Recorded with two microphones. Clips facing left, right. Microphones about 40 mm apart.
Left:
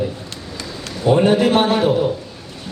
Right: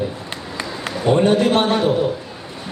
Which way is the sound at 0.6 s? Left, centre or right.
Right.